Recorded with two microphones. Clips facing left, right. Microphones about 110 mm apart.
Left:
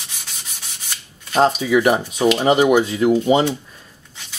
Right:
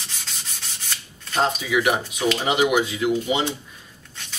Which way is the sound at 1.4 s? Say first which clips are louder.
Left 6 dB; 40° left (ahead or behind).